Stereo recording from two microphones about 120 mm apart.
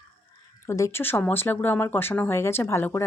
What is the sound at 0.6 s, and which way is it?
Speech, 25° left (ahead or behind).